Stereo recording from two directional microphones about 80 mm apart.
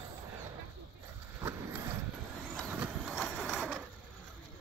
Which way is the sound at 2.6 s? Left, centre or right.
Centre.